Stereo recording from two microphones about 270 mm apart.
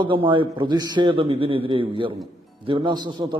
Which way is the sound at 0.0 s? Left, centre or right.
Centre.